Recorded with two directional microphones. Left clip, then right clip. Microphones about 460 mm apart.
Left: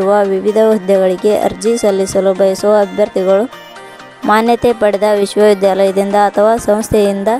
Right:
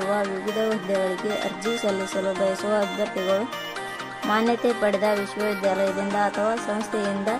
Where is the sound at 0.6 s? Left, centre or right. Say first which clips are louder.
Left 14 dB; centre.